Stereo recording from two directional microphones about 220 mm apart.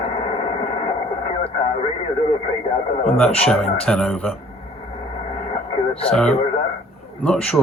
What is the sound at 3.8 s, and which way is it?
Speech, 5° left (ahead or behind).